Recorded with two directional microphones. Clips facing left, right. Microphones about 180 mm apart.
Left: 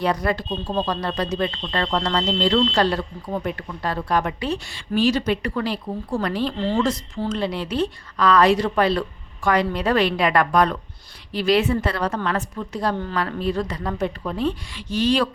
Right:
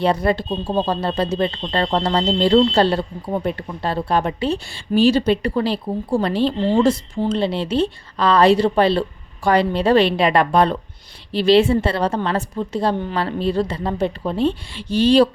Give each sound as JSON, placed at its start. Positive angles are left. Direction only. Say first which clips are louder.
{"t": 0.0, "sound": "speech", "louder": "right 4 dB", "side_deg": -25}
{"t": 6.6, "sound": "speech", "louder": "right 5 dB", "side_deg": -15}
{"t": 7.3, "sound": "speech", "louder": "right 4 dB", "side_deg": -30}